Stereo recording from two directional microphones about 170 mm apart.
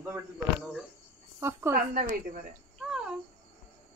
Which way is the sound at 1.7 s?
55° right (ahead or behind).